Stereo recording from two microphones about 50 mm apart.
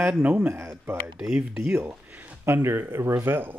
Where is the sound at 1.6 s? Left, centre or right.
Right.